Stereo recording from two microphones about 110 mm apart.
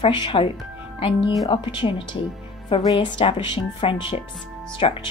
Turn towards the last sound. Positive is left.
turn(degrees=60)  # may be behind; listen again after turning